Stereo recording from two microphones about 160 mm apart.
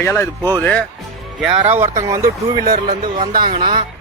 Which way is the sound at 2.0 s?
20° right (ahead or behind).